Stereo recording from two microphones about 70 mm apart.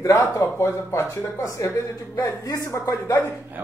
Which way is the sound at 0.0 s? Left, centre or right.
Left.